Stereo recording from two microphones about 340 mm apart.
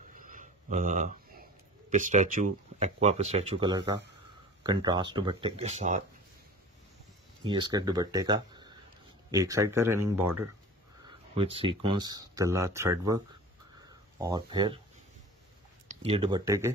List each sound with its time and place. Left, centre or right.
0.1 s a sound: right
1.9 s speech: right
7.4 s speech: centre
15.9 s speech: centre